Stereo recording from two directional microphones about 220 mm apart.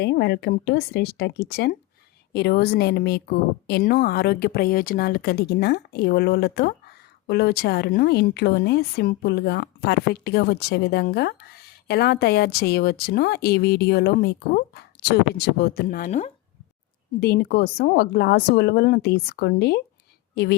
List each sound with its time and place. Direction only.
0.0 s a woman's voice: 50° left (ahead or behind); by 16.3 s 35° left (ahead or behind)
17.2 s a woman's voice: 45° left (ahead or behind)